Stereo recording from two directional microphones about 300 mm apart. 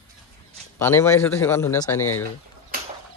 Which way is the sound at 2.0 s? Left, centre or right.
Left.